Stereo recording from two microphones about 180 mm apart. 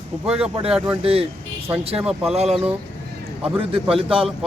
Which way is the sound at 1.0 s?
35° right (ahead or behind).